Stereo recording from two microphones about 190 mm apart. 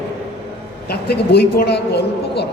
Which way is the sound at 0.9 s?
60° left (ahead or behind).